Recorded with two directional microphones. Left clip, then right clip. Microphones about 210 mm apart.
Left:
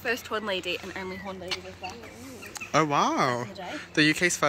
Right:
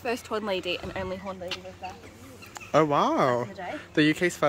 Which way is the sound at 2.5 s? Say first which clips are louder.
Right 1 dB; 15° right (ahead or behind).